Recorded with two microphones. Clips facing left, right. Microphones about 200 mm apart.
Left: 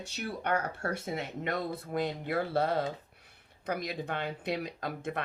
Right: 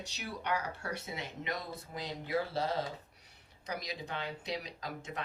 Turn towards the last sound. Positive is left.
turn(degrees=55)  # may be behind; listen again after turning